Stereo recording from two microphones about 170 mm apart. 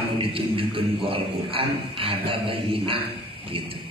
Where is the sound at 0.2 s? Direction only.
30° right (ahead or behind).